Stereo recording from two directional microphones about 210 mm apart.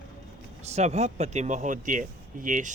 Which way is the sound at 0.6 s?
30° right (ahead or behind).